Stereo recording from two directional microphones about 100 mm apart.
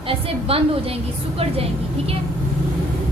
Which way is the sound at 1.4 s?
90° right.